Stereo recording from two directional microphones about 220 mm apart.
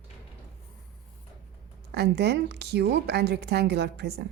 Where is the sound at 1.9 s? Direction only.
50° right (ahead or behind).